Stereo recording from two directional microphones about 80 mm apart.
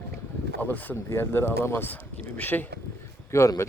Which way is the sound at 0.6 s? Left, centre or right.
Left.